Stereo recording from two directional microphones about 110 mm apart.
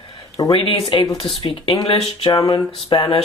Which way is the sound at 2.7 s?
50° left (ahead or behind).